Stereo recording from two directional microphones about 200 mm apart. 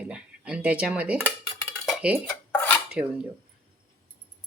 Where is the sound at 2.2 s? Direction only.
10° left (ahead or behind).